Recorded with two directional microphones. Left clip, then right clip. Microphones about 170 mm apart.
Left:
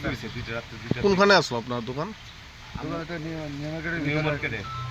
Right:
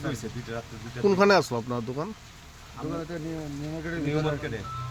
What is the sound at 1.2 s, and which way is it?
Speech, 15° right (ahead or behind).